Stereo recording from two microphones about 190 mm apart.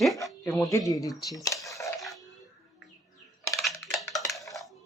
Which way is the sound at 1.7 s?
15° left (ahead or behind).